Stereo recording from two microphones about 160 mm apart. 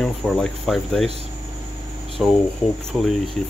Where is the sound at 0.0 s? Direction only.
Centre (ahead or behind).